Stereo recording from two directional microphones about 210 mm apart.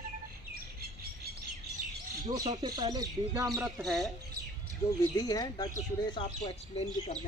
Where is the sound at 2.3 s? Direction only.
20° right (ahead or behind).